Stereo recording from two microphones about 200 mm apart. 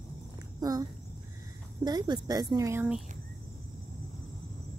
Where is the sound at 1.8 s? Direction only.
20° right (ahead or behind).